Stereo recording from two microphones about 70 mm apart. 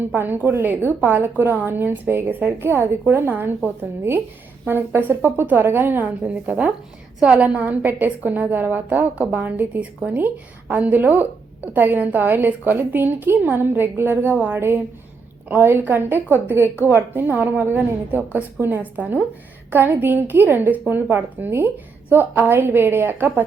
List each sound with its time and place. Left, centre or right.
0.0 s a woman's voice: right